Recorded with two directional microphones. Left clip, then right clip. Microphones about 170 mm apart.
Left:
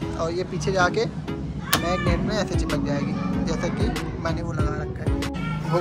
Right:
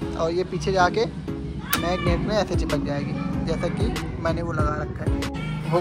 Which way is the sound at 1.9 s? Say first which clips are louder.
Even; 5° left (ahead or behind).